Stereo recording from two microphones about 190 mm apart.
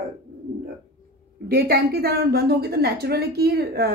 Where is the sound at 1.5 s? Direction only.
50° right (ahead or behind).